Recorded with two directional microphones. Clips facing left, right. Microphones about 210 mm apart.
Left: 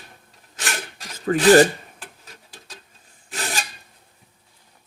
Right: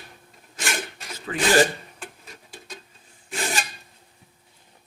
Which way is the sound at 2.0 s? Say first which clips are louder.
Right 3 dB; 5° left (ahead or behind).